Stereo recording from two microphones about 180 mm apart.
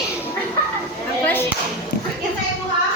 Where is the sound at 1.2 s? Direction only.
10° left (ahead or behind).